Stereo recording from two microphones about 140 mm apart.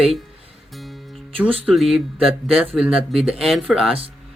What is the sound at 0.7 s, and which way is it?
Music, centre (ahead or behind).